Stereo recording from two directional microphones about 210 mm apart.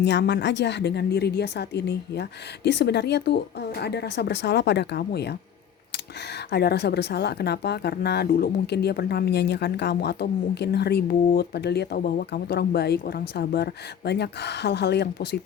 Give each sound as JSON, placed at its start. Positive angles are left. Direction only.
{"t": 0.0, "sound": "speech", "side_deg": 55}
{"t": 6.5, "sound": "speech", "side_deg": 50}